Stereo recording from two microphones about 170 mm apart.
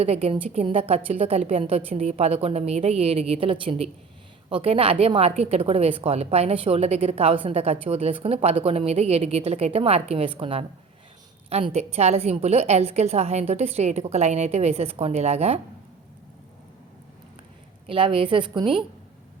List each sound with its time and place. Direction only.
0.0 s a woman's voice: 35° right (ahead or behind)
17.8 s a woman's voice: 30° right (ahead or behind)